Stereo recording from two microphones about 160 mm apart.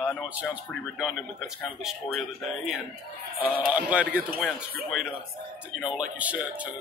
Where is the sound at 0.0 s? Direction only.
5° right (ahead or behind).